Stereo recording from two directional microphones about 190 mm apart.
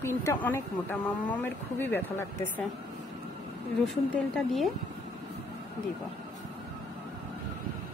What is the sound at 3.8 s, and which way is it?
Speech, centre (ahead or behind).